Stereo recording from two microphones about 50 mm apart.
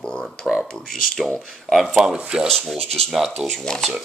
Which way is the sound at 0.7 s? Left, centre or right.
Centre.